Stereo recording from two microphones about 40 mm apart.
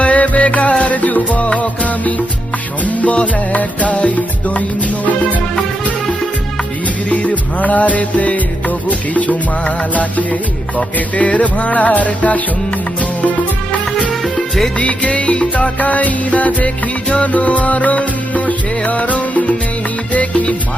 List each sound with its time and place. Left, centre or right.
0.0 s music: left
7.1 s music: left
14.1 s music: centre
14.8 s music: left
15.8 s music: left